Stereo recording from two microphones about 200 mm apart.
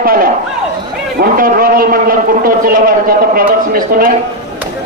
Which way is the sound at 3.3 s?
45° right (ahead or behind).